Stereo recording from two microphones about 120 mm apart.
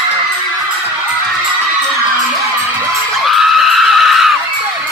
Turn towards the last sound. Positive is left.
turn(degrees=0)  # may be behind; listen again after turning